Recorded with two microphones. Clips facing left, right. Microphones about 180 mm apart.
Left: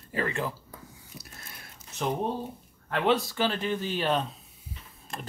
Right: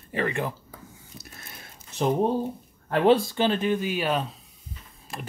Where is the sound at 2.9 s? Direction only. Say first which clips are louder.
Right 6 dB; 40° right (ahead or behind).